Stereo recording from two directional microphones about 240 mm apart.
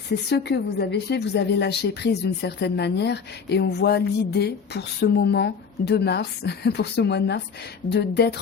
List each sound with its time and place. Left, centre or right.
0.3 s a woman's voice: left